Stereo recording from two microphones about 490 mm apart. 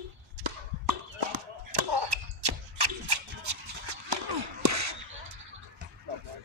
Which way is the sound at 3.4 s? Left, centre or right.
Right.